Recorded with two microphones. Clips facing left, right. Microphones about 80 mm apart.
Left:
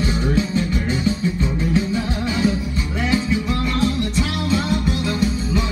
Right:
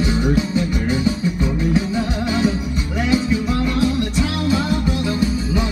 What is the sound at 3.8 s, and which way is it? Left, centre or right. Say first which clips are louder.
Music: right 2 dB; right.